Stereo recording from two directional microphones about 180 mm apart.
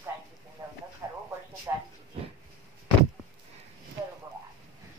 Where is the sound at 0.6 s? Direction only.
20° right (ahead or behind).